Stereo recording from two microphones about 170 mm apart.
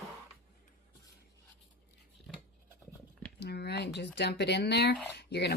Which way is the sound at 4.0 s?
75° left (ahead or behind).